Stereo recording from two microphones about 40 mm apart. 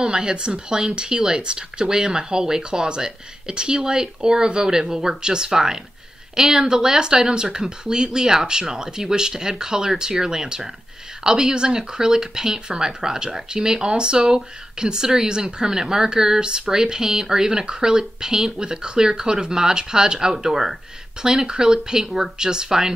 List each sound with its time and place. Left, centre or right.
0.0 s speech: right